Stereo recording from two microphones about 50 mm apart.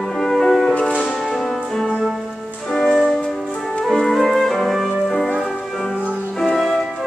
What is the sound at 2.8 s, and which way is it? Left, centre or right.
Music, centre.